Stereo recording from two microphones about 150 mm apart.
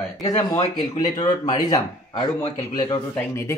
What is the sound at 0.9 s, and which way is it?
Speech, 25° left (ahead or behind).